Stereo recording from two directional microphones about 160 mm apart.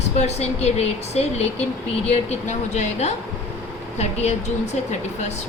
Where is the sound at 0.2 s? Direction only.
45° left (ahead or behind).